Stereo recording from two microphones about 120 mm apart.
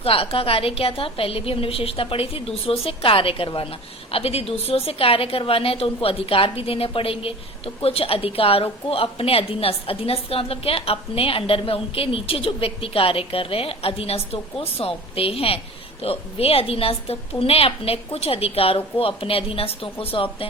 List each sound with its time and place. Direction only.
0.0 s a woman's voice: 50° left (ahead or behind)